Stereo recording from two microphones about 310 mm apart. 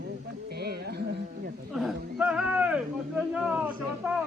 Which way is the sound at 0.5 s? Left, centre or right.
Right.